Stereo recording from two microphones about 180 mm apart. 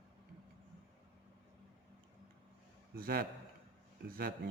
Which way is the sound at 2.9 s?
55° right (ahead or behind).